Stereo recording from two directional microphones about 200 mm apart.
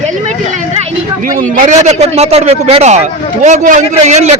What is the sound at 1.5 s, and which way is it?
A man's voice, 40° right (ahead or behind).